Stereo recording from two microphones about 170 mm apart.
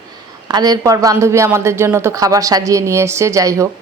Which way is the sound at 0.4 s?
20° right (ahead or behind).